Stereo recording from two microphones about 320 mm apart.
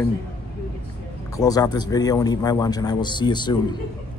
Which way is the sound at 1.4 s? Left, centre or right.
Centre.